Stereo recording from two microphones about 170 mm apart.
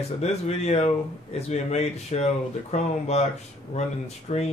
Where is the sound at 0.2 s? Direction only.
40° left (ahead or behind).